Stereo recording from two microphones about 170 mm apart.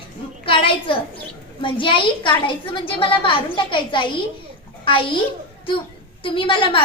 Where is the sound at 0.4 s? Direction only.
30° left (ahead or behind).